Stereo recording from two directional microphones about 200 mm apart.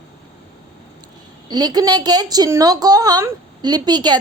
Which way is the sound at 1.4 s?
20° right (ahead or behind).